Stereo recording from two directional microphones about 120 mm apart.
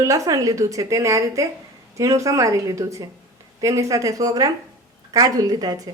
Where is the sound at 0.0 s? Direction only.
25° right (ahead or behind).